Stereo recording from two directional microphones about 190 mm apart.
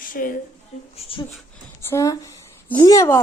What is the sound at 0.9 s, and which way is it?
Speech, 30° left (ahead or behind).